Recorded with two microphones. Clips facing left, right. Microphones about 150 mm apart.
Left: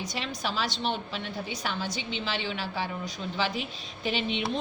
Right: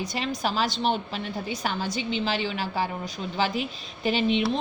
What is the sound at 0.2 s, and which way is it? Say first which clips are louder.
A woman's voice: right 5 dB; 45° right (ahead or behind).